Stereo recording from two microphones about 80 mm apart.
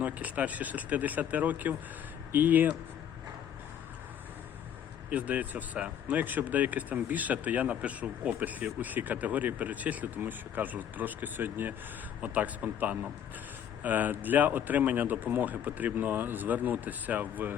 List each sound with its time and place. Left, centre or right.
0.0 s speech: centre
5.1 s speech: centre